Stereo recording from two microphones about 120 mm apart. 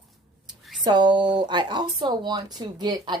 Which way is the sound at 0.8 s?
40° right (ahead or behind).